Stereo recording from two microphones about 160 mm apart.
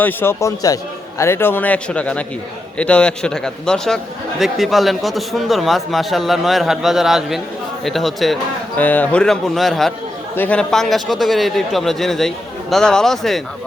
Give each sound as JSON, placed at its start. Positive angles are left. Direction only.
{"t": 0.0, "sound": "a man's voice", "side_deg": 15}